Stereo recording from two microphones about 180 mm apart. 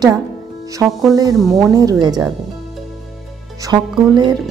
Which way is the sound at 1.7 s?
20° right (ahead or behind).